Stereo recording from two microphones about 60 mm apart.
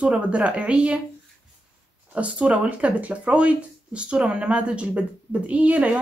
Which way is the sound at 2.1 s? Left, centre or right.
Right.